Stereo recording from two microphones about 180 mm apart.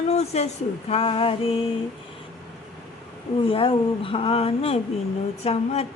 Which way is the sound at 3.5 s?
30° left (ahead or behind).